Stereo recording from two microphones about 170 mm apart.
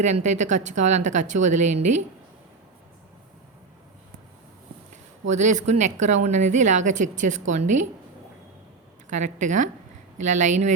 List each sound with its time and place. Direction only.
0.0 s a woman's voice: 45° right (ahead or behind)
5.3 s a woman's voice: 45° right (ahead or behind)
9.0 s a woman's voice: 45° right (ahead or behind)